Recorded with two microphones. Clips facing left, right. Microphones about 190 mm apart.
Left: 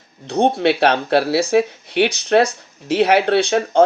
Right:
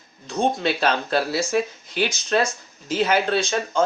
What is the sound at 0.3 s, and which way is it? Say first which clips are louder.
Speech: left 6 dB; 65° left (ahead or behind).